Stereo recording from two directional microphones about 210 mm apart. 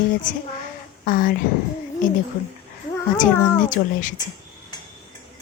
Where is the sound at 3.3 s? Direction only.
10° left (ahead or behind).